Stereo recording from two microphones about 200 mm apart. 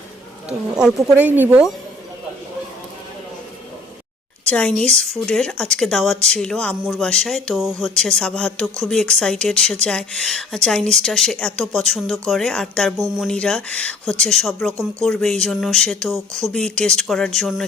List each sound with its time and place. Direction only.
0.4 s speech: 5° right (ahead or behind)
4.4 s speech: 5° left (ahead or behind)
14.7 s speech: 15° right (ahead or behind)
15.0 s speech: centre (ahead or behind)